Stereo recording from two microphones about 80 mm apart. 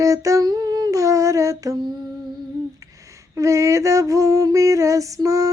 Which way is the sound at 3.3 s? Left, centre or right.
Right.